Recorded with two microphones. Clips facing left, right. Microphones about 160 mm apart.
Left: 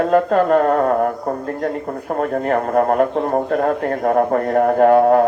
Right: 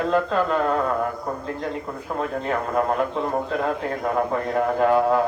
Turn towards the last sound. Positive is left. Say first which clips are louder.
# left 7 dB
turn(degrees=55)  # may be behind; listen again after turning